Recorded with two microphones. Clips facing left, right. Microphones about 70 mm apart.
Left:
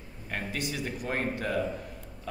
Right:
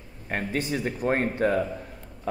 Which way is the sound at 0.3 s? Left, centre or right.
Right.